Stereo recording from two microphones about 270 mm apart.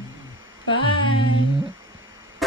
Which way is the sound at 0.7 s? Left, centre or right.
Centre.